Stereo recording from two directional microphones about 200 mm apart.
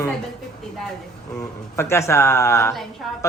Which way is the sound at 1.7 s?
15° left (ahead or behind).